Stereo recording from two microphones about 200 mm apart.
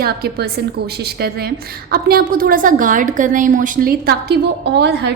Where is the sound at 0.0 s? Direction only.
50° right (ahead or behind).